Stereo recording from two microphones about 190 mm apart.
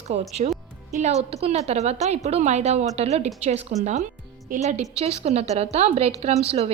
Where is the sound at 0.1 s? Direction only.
35° right (ahead or behind).